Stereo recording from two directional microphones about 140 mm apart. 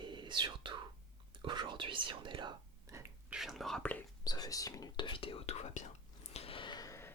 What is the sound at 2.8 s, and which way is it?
Whispering, 20° right (ahead or behind).